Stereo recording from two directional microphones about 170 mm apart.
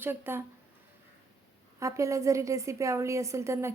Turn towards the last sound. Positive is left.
turn(degrees=-15)  # may be behind; listen again after turning